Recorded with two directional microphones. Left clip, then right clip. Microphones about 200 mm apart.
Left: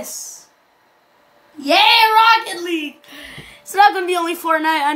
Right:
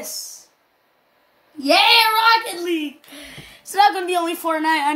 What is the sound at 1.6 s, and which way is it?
Speech, 15° right (ahead or behind).